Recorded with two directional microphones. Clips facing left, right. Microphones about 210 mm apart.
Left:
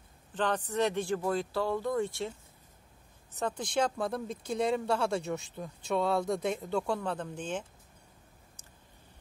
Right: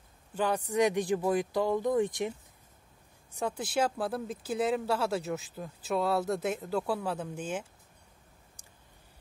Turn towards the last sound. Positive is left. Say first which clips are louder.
# right 1 dB
turn(degrees=-10)  # may be behind; listen again after turning